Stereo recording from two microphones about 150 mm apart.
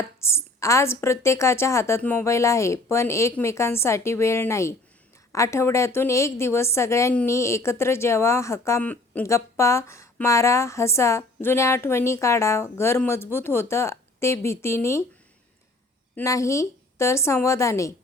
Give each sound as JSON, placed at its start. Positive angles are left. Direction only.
{"t": 0.2, "sound": "a woman's voice", "side_deg": 15}
{"t": 16.1, "sound": "a woman's voice", "side_deg": 20}